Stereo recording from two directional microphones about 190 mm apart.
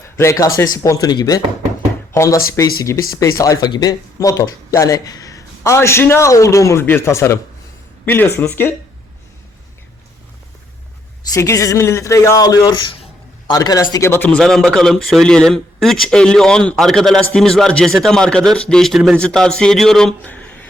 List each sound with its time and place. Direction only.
0.2 s speech: 15° left (ahead or behind)
11.3 s speech: 15° left (ahead or behind)